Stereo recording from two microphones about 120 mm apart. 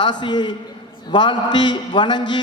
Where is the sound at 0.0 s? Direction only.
40° left (ahead or behind).